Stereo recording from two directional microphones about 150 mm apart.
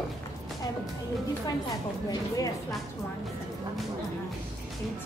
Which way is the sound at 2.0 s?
25° left (ahead or behind).